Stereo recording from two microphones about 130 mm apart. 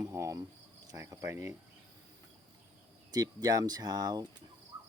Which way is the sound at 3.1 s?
30° right (ahead or behind).